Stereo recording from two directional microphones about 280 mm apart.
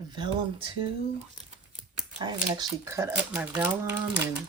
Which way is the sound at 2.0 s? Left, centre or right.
Centre.